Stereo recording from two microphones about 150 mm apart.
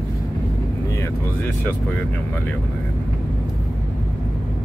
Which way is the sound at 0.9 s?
20° left (ahead or behind).